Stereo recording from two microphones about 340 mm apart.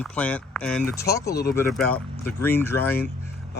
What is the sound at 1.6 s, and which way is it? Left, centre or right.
Speech, centre.